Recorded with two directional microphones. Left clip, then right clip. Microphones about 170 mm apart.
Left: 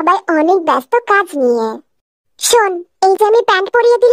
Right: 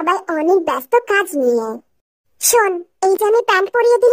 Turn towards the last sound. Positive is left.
turn(degrees=25)  # may be behind; listen again after turning